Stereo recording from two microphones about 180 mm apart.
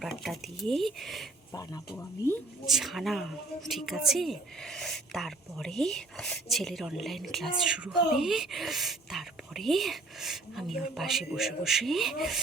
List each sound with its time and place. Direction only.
0.0 s speech: centre (ahead or behind)
1.5 s speech: 20° left (ahead or behind)
2.6 s speech: centre (ahead or behind)